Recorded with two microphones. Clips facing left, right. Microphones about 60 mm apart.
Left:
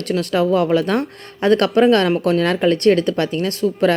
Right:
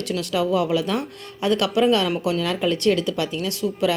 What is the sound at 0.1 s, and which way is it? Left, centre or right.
Speech, left.